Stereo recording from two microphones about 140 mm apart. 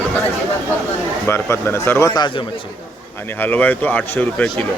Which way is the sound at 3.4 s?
15° left (ahead or behind).